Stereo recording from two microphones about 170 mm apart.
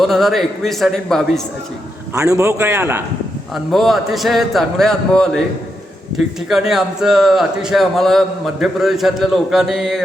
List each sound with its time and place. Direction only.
0.0 s speech: centre (ahead or behind)
2.1 s a man's voice: 20° right (ahead or behind)
3.5 s speech: centre (ahead or behind)